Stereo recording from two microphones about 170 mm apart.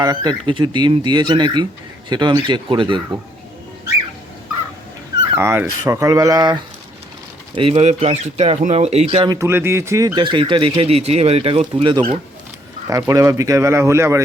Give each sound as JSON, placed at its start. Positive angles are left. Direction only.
{"t": 0.0, "sound": "speech", "side_deg": -20}
{"t": 5.4, "sound": "speech", "side_deg": -15}
{"t": 7.5, "sound": "speech", "side_deg": -35}
{"t": 9.3, "sound": "speech", "side_deg": -15}
{"t": 12.9, "sound": "speech", "side_deg": -20}